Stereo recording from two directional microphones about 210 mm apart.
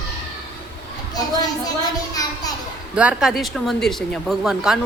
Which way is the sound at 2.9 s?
5° right (ahead or behind).